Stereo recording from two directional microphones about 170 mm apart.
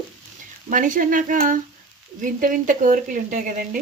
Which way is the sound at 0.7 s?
50° right (ahead or behind).